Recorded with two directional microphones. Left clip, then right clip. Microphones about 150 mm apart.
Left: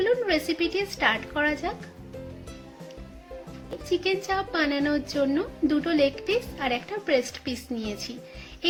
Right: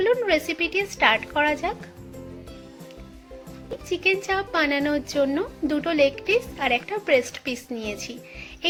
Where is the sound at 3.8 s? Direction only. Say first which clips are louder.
Right 3 dB; 20° right (ahead or behind).